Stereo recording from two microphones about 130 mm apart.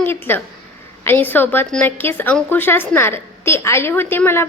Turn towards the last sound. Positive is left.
turn(degrees=15)  # may be behind; listen again after turning